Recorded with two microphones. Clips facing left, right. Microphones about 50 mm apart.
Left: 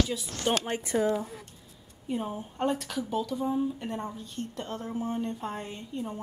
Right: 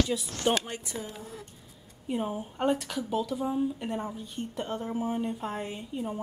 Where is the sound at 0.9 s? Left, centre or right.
Left.